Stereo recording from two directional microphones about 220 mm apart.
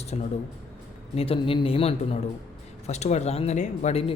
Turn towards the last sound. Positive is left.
turn(degrees=25)  # may be behind; listen again after turning